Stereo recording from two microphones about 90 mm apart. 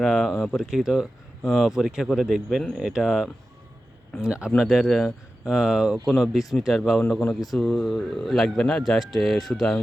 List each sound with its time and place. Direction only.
0.0 s speech: centre (ahead or behind)